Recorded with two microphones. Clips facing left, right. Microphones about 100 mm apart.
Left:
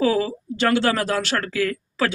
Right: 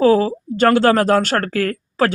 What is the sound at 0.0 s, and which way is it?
Speech, 40° right (ahead or behind).